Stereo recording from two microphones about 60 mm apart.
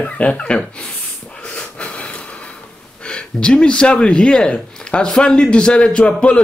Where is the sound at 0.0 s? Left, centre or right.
Centre.